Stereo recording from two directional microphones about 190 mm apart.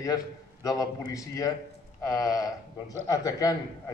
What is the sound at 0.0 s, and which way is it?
A man's voice, 20° left (ahead or behind).